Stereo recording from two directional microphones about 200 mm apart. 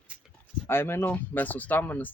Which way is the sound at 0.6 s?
10° left (ahead or behind).